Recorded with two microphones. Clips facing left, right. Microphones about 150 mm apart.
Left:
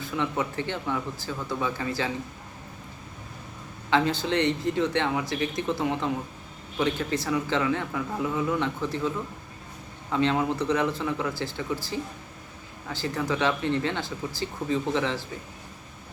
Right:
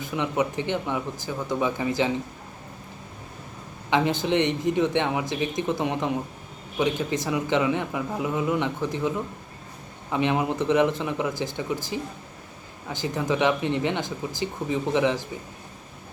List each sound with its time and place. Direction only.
0.0 s speech: 20° right (ahead or behind)
3.8 s a man's voice: 20° right (ahead or behind)